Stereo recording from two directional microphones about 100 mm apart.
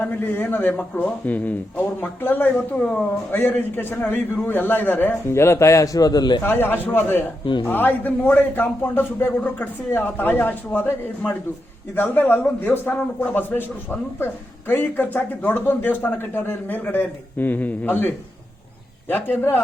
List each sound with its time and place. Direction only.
0.0 s speech: 20° left (ahead or behind); by 6.4 s 45° left (ahead or behind)
6.4 s speech: 20° left (ahead or behind)